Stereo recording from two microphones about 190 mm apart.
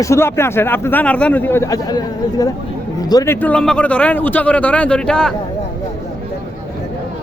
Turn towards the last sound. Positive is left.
turn(degrees=5)  # may be behind; listen again after turning